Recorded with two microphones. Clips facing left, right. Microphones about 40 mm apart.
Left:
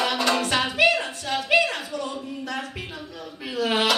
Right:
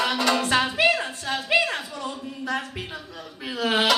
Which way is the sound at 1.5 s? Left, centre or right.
Right.